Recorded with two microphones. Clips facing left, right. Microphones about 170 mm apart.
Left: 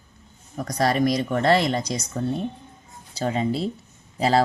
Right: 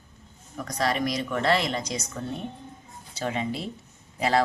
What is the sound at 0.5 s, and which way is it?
Speech, 40° left (ahead or behind).